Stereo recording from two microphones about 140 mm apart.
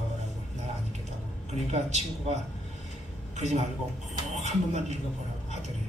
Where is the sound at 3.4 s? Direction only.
55° right (ahead or behind).